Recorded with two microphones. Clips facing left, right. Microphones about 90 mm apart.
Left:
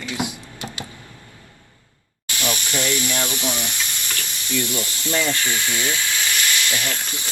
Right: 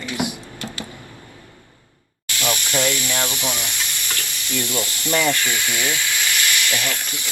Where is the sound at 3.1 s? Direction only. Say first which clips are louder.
Right 1 dB; 15° right (ahead or behind).